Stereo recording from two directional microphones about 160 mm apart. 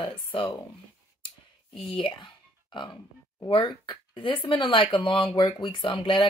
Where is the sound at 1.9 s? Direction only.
30° left (ahead or behind).